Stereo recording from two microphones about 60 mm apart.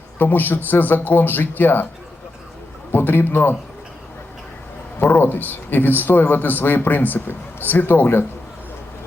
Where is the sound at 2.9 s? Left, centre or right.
Left.